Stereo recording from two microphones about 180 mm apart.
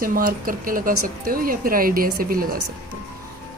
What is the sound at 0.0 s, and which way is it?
Speech, 50° right (ahead or behind).